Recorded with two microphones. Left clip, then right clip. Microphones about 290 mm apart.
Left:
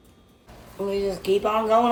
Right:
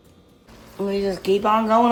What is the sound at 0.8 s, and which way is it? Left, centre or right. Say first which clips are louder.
Speech: right 2 dB; right.